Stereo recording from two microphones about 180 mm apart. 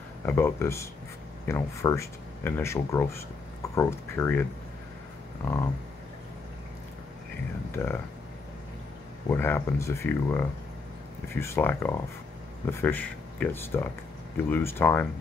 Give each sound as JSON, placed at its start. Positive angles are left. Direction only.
{"t": 0.2, "sound": "speech", "side_deg": 10}
{"t": 7.7, "sound": "speech", "side_deg": 10}
{"t": 9.3, "sound": "speech", "side_deg": 10}